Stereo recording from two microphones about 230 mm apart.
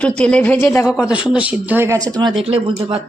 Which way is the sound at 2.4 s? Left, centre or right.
Right.